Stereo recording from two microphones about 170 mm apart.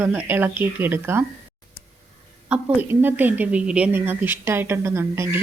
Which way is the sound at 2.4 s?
10° right (ahead or behind).